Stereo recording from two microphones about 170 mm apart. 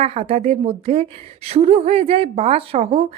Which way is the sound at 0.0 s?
35° right (ahead or behind).